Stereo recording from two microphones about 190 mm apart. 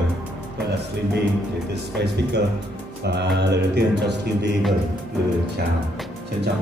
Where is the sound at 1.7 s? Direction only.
60° right (ahead or behind).